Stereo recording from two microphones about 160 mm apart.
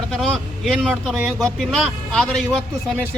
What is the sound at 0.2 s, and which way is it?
Speech, centre (ahead or behind).